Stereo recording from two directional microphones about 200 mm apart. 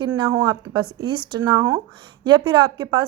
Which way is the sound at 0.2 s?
20° right (ahead or behind).